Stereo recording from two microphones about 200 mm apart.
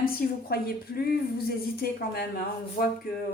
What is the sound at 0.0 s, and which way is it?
Speech, 45° left (ahead or behind).